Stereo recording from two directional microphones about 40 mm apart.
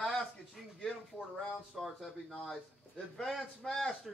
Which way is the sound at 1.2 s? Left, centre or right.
Left.